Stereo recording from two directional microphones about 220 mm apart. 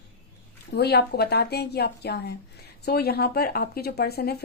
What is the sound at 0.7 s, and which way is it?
A woman's voice, 45° left (ahead or behind).